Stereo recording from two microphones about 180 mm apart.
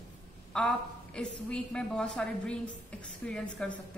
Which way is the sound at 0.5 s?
5° left (ahead or behind).